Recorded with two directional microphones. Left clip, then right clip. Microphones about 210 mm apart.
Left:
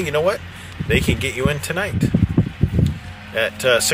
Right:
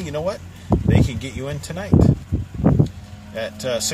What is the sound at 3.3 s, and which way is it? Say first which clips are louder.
Speech: left 7 dB; 10° right (ahead or behind).